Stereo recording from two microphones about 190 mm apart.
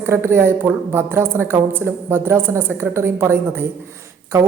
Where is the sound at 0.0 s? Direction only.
15° right (ahead or behind).